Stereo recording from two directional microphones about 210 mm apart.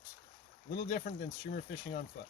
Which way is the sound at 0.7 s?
35° left (ahead or behind).